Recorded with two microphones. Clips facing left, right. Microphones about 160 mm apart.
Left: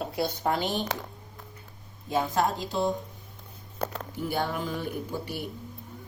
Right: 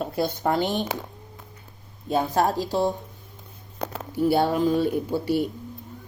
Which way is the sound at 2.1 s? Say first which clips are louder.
Right 4 dB; 35° right (ahead or behind).